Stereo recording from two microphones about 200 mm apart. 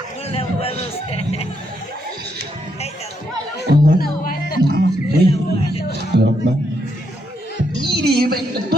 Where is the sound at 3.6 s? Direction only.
50° left (ahead or behind).